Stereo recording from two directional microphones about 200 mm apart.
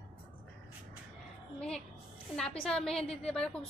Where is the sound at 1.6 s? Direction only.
5° left (ahead or behind).